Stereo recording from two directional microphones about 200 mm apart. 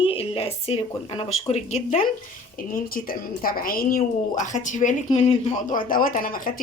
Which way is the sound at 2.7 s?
45° left (ahead or behind).